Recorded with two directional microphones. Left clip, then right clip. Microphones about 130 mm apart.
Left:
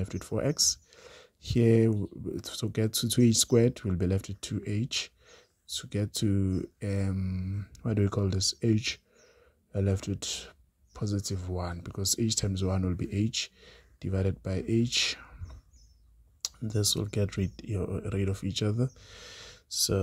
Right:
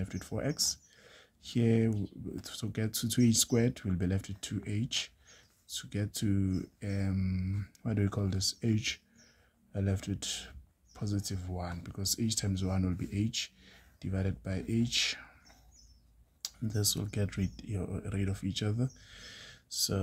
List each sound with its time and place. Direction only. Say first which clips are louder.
0.0 s speech: left 6 dB; 35° left (ahead or behind)
6.8 s speech: left 4 dB; 40° left (ahead or behind)
7.2 s a sound: even; 20° left (ahead or behind)
7.8 s speech: left 5 dB; 40° left (ahead or behind)
16.3 s speech: left 5 dB; 35° left (ahead or behind)